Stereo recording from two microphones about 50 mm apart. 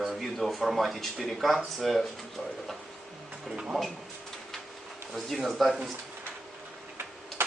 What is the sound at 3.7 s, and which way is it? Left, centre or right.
Speech, centre.